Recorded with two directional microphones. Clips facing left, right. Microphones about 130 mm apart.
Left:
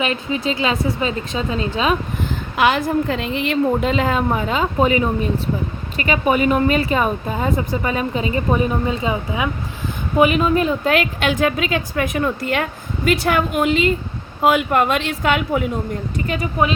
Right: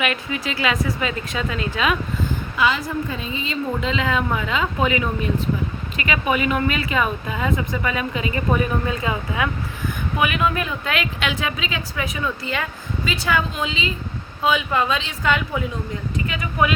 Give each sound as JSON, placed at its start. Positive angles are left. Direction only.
{"t": 0.0, "sound": "a woman's voice", "side_deg": 30}
{"t": 2.3, "sound": "a woman's voice", "side_deg": 65}
{"t": 16.2, "sound": "speech", "side_deg": 40}